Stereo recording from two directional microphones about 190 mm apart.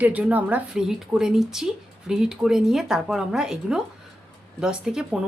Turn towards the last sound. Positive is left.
turn(degrees=-5)  # may be behind; listen again after turning